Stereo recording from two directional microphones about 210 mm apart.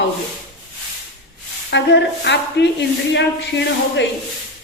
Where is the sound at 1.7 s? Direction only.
55° left (ahead or behind).